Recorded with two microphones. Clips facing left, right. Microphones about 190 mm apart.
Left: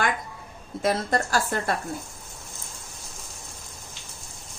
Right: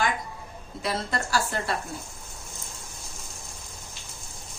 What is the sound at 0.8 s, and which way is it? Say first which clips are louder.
Speech: left 5 dB; 45° left (ahead or behind).